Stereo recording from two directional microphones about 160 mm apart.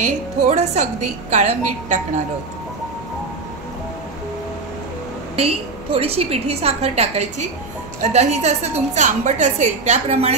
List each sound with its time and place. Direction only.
0.0 s a woman's voice: 45° right (ahead or behind)
5.3 s a woman's voice: 35° right (ahead or behind)